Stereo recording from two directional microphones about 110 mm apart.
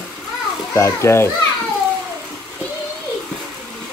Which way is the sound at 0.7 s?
25° left (ahead or behind).